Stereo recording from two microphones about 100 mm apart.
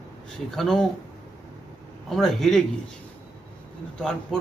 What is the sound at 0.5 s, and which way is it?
Speech, 5° left (ahead or behind).